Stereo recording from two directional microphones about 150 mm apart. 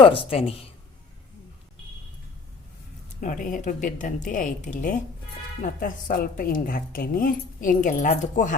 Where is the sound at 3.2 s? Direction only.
60° left (ahead or behind).